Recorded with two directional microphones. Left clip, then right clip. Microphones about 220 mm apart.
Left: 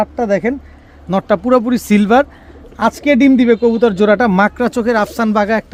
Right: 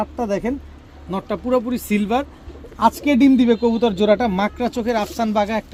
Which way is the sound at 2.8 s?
35° left (ahead or behind).